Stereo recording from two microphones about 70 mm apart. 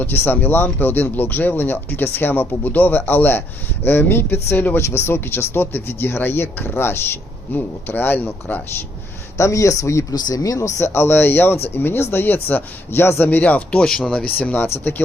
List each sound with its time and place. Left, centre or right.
0.0 s speech: left
9.4 s speech: left
10.2 s speech: left
10.6 s speech: left